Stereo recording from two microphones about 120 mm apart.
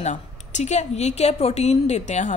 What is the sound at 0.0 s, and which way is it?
A woman's voice, 80° left.